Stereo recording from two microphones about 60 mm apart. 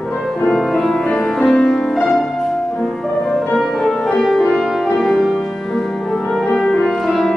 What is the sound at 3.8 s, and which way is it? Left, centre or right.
Music, centre.